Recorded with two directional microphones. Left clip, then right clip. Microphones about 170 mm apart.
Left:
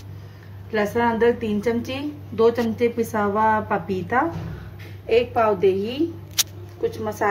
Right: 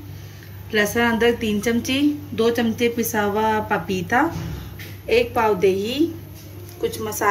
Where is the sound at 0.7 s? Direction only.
30° left (ahead or behind).